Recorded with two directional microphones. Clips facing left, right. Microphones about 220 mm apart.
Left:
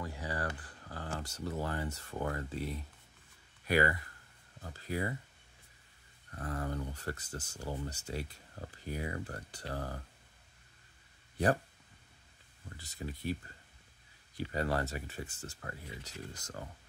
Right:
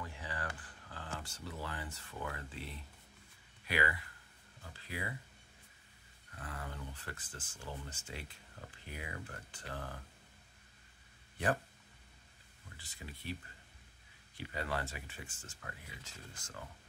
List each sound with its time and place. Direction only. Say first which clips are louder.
0.0 s a sound: left 6 dB; 40° left (ahead or behind)
3.6 s speech: left 7 dB; 45° left (ahead or behind)
6.3 s speech: left 9 dB; 45° left (ahead or behind)
12.7 s speech: left 8 dB; 40° left (ahead or behind)